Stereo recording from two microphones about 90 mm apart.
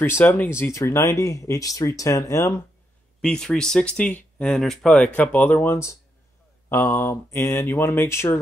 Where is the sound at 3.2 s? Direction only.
10° left (ahead or behind); by 8.4 s 30° left (ahead or behind).